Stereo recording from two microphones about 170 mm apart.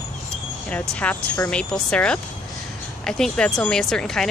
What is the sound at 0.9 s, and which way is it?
A woman's voice, 10° left (ahead or behind).